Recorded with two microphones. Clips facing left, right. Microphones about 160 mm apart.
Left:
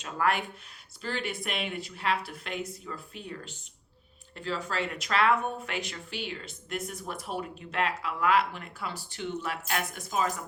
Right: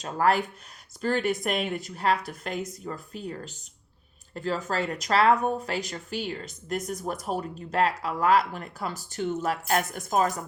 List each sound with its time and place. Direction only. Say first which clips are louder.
0.0 s a woman's voice: right 5 dB; 35° right (ahead or behind)